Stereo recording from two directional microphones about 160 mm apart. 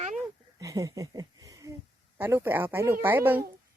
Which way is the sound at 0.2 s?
20° right (ahead or behind).